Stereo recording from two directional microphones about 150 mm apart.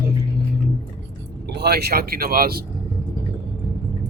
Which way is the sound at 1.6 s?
90° right.